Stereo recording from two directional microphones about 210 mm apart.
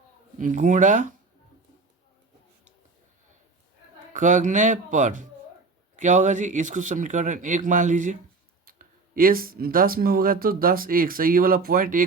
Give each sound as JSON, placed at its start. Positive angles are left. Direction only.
{"t": 0.3, "sound": "speech", "side_deg": -35}
{"t": 4.1, "sound": "speech", "side_deg": -35}